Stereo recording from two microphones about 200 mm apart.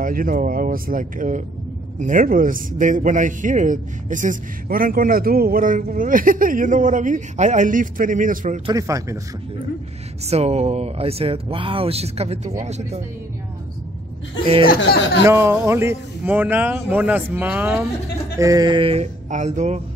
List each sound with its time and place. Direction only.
0.0 s a man's voice: 45° right (ahead or behind)
8.6 s speech: 15° right (ahead or behind)
10.2 s a man's voice: 30° right (ahead or behind)
14.4 s a sound: 25° right (ahead or behind)
14.8 s speech: 65° left (ahead or behind)
15.2 s speech: 10° right (ahead or behind)
18.4 s a sound: 20° right (ahead or behind); by 19.8 s 35° right (ahead or behind)